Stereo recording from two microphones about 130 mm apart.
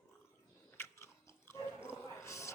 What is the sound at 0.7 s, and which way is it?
Biting, 20° left (ahead or behind).